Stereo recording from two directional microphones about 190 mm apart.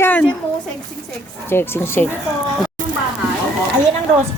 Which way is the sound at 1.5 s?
10° left (ahead or behind).